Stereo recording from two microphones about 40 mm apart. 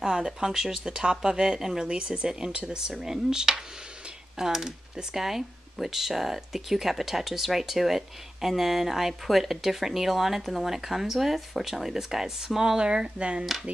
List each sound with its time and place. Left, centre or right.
0.0 s speech: centre
1.9 s speech: right